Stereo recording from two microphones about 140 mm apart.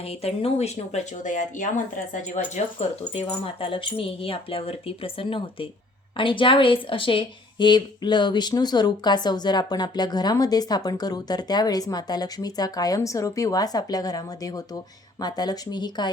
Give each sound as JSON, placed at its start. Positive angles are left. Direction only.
{"t": 0.0, "sound": "speech", "side_deg": 45}
{"t": 2.3, "sound": "speech", "side_deg": 55}